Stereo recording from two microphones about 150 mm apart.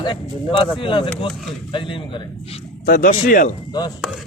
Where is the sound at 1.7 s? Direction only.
35° left (ahead or behind).